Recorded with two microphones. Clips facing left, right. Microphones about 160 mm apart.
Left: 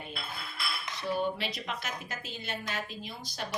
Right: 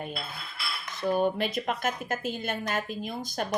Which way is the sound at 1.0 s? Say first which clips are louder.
Right 6 dB; 50° right (ahead or behind).